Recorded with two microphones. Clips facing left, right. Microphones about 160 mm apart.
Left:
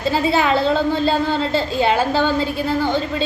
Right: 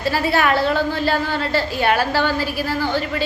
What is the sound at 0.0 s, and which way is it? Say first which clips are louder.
A woman's voice: left 1 dB; 20° left (ahead or behind).